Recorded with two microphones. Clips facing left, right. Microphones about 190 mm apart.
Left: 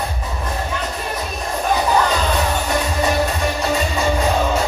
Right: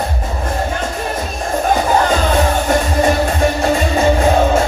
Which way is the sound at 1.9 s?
45° right (ahead or behind).